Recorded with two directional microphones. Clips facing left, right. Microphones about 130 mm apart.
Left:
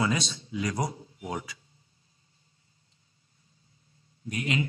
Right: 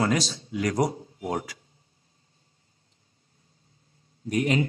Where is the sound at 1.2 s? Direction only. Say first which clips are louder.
Right 5 dB; 85° right.